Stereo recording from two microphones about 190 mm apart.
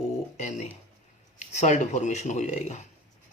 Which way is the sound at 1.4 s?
40° left (ahead or behind).